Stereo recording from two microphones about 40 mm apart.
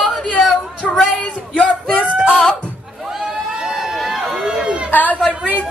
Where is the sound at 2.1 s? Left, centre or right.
Right.